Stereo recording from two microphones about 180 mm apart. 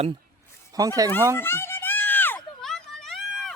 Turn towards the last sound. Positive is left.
turn(degrees=0)  # may be behind; listen again after turning